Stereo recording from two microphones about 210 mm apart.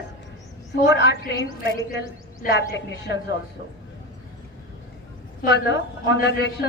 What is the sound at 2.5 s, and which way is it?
Speech, 55° left (ahead or behind).